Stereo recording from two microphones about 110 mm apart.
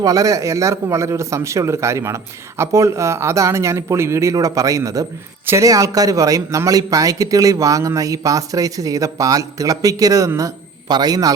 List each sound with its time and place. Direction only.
0.0 s a man's voice: 30° right (ahead or behind)